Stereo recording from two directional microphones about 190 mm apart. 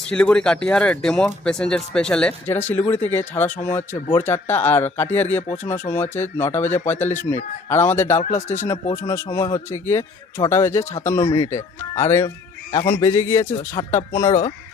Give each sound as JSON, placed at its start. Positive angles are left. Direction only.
{"t": 0.0, "sound": "speech", "side_deg": 5}